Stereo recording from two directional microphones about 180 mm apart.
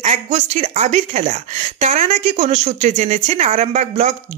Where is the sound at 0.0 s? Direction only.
40° right (ahead or behind).